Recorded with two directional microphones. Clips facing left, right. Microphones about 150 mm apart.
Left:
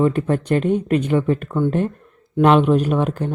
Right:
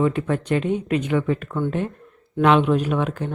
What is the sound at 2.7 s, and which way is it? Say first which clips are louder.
Speech: left 3 dB; 40° left (ahead or behind).